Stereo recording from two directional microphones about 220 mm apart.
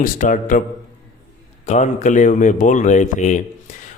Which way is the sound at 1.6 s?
35° left (ahead or behind).